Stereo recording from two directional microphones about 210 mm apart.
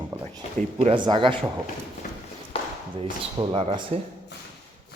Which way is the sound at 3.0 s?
25° right (ahead or behind).